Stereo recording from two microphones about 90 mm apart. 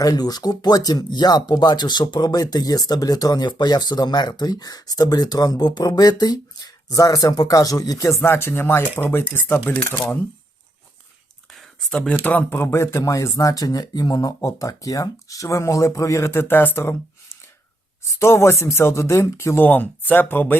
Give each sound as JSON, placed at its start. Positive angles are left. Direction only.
{"t": 0.0, "sound": "speech", "side_deg": 45}
{"t": 11.5, "sound": "a sound", "side_deg": 0}
{"t": 12.2, "sound": "speech", "side_deg": 15}
{"t": 12.5, "sound": "speech", "side_deg": 30}
{"t": 19.6, "sound": "speech", "side_deg": 20}